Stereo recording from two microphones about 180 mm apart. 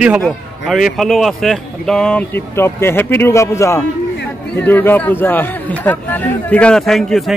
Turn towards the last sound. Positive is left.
turn(degrees=0)  # may be behind; listen again after turning